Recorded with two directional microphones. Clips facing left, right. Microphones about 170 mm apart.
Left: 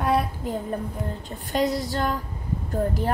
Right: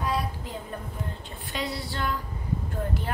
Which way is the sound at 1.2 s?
45° left (ahead or behind).